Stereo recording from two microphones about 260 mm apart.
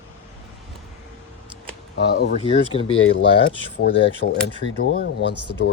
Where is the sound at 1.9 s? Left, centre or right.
Left.